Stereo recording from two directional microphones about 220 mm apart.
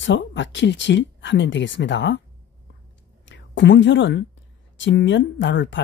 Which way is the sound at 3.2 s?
55° left (ahead or behind).